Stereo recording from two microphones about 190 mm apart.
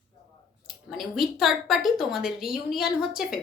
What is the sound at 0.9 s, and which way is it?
A woman's voice, centre (ahead or behind).